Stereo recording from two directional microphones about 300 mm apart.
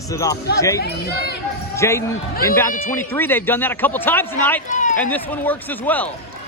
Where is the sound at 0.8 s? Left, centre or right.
Left.